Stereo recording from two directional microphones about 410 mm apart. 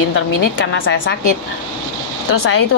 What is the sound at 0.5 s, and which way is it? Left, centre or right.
Speech, left.